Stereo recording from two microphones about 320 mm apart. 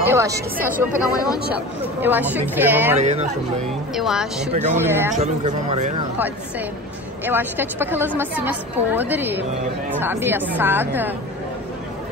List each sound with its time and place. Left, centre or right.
0.0 s a woman's voice: centre
3.0 s speech: right
3.9 s a woman's voice: centre
5.1 s speech: right
7.2 s a woman's voice: centre